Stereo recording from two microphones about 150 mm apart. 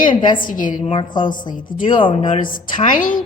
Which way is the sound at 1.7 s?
60° left (ahead or behind).